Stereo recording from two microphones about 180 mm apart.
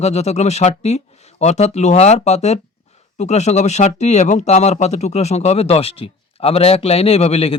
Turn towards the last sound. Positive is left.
turn(degrees=35)  # may be behind; listen again after turning